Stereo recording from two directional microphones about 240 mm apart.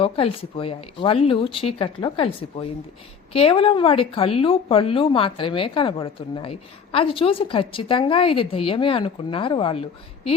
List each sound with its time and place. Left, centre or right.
0.0 s speech: left